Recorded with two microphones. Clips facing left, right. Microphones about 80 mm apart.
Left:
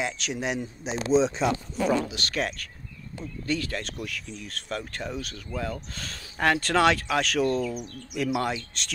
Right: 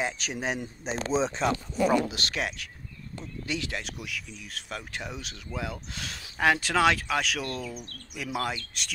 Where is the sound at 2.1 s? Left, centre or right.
Right.